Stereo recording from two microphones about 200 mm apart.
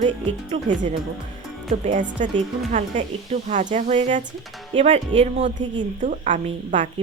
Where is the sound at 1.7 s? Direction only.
35° right (ahead or behind).